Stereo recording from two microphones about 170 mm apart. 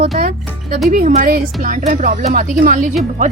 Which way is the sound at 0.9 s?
50° right (ahead or behind).